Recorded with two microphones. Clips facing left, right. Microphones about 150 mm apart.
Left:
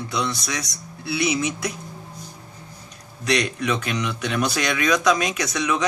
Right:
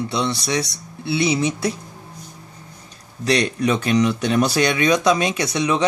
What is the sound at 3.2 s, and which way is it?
Speech, 30° right (ahead or behind).